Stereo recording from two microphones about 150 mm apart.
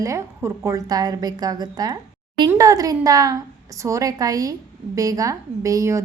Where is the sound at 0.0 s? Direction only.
20° right (ahead or behind).